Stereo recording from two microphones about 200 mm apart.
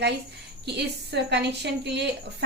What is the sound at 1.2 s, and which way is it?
Speech, 60° right (ahead or behind).